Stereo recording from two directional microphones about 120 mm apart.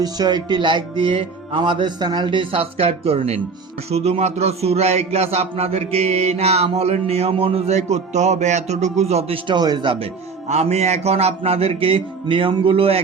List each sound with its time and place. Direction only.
0.0 s music: 35° right (ahead or behind); by 3.4 s 60° right (ahead or behind)
3.8 s a man's voice: 60° right (ahead or behind)
9.5 s music: 35° right (ahead or behind)
10.5 s a man's voice: 65° right (ahead or behind)